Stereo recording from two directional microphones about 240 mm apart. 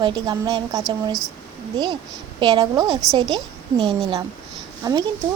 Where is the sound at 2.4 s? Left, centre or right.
Right.